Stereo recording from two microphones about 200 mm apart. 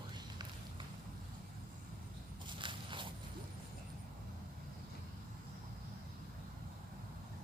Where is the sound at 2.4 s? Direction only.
25° right (ahead or behind).